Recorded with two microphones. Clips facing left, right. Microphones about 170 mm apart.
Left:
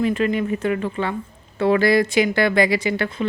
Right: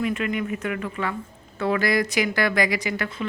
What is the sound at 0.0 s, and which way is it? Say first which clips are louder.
Speech: left 5 dB; 30° left (ahead or behind).